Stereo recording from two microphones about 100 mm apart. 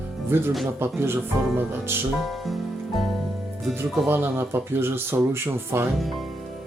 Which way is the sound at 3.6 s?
Centre (ahead or behind).